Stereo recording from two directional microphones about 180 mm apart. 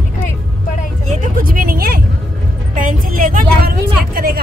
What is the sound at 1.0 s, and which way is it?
Vehicle, 40° right (ahead or behind).